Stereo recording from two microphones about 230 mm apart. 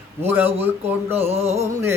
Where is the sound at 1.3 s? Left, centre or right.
Right.